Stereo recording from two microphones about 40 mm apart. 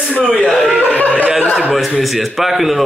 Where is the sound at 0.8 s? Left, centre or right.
Left.